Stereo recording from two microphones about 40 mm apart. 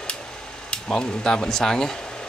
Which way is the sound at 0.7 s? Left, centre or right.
Centre.